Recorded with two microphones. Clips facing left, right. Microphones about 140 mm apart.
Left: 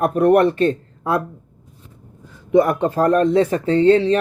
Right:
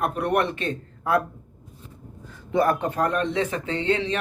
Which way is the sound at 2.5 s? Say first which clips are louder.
Left 6 dB; 20° left (ahead or behind).